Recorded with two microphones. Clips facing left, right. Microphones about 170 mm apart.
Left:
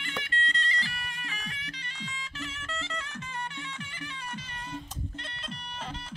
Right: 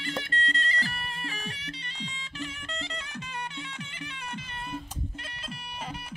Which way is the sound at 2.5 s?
20° right (ahead or behind).